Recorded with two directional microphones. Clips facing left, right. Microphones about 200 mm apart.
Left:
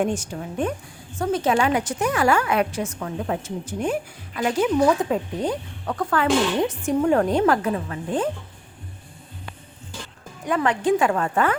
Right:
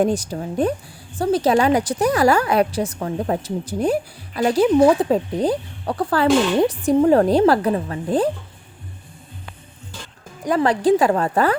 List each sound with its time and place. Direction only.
0.0 s a woman's voice: 35° right (ahead or behind)
10.4 s a woman's voice: 35° right (ahead or behind)